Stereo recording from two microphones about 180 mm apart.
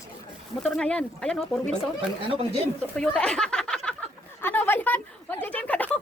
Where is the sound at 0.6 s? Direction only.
5° left (ahead or behind).